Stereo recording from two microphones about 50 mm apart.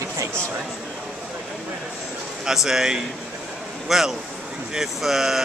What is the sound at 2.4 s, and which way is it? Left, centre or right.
Speech, centre.